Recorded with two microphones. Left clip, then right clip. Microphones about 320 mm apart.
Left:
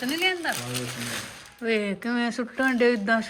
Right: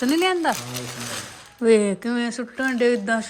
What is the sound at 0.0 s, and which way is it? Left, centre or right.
Speech, right.